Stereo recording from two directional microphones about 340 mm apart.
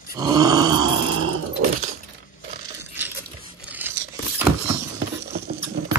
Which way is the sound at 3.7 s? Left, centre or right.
Centre.